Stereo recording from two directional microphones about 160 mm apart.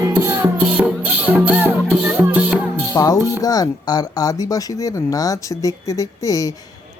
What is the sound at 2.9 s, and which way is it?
A man's voice, 25° left (ahead or behind).